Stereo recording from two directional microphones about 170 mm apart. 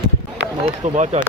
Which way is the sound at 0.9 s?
40° right (ahead or behind).